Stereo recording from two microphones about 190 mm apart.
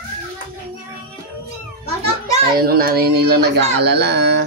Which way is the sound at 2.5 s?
50° right (ahead or behind).